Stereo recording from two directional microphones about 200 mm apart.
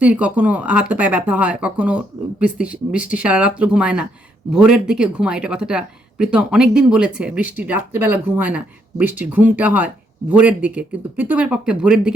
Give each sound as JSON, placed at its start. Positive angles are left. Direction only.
{"t": 0.0, "sound": "speech", "side_deg": -5}